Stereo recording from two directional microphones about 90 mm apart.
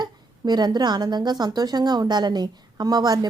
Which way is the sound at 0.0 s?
50° right (ahead or behind).